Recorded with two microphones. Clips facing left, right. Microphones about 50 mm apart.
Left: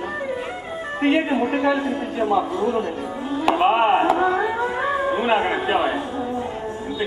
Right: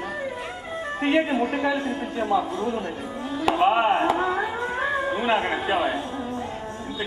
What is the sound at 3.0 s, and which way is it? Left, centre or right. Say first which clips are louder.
Music: left 4 dB; centre.